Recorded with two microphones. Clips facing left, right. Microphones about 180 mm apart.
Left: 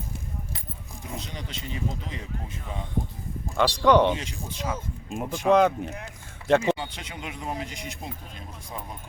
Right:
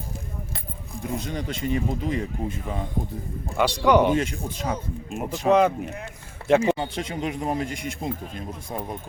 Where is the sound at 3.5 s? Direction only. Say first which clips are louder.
Even; 10° right (ahead or behind).